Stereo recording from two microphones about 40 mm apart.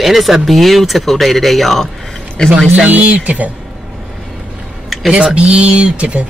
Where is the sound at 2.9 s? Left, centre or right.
Right.